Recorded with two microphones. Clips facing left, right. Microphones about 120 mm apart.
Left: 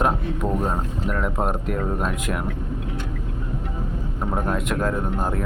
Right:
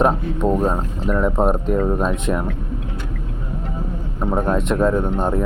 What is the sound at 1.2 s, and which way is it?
Speech, 30° right (ahead or behind).